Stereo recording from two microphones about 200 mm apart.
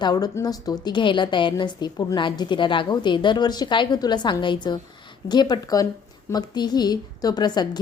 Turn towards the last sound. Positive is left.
turn(degrees=20)  # may be behind; listen again after turning